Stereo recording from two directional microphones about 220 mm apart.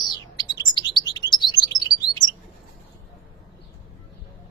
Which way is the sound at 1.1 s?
20° left (ahead or behind).